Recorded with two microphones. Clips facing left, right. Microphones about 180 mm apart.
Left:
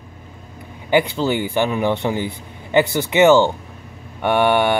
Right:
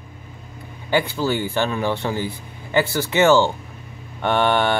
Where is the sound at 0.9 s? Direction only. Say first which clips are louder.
Left 3 dB; 20° left (ahead or behind).